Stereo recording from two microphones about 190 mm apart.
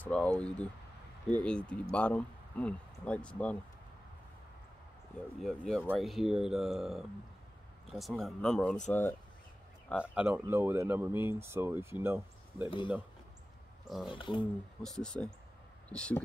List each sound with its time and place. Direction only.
0.0 s speech: 5° left (ahead or behind)
5.4 s speech: centre (ahead or behind)
10.1 s speech: 10° right (ahead or behind)
12.6 s speech: 25° left (ahead or behind)
13.8 s speech: centre (ahead or behind)
14.1 s speech: 25° left (ahead or behind)
14.8 s speech: 5° left (ahead or behind)